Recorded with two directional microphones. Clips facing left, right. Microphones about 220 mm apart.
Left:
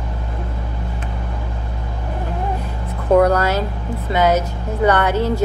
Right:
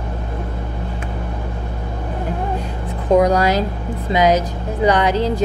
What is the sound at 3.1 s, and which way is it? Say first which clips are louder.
Speech: even; 15° right (ahead or behind).